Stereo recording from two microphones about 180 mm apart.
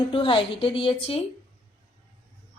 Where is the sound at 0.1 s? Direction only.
30° left (ahead or behind).